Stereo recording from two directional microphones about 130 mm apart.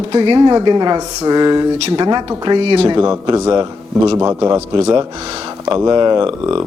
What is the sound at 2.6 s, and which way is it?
Speech, 45° right (ahead or behind).